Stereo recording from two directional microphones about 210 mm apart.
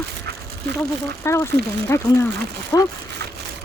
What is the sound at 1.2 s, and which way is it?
Speech, 10° left (ahead or behind).